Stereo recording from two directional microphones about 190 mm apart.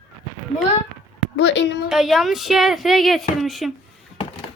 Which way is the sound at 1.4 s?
70° left (ahead or behind).